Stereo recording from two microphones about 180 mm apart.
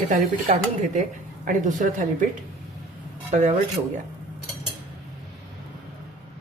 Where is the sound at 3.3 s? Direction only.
40° right (ahead or behind).